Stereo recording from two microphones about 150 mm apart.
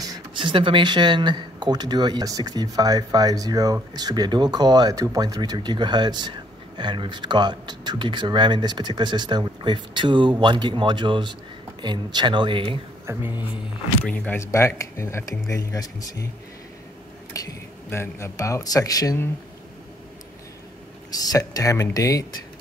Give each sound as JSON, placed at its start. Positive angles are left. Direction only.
{"t": 0.0, "sound": "speech", "side_deg": -30}
{"t": 13.0, "sound": "speech", "side_deg": -15}
{"t": 14.0, "sound": "speech", "side_deg": 10}
{"t": 17.3, "sound": "speech", "side_deg": 20}
{"t": 21.1, "sound": "speech", "side_deg": 25}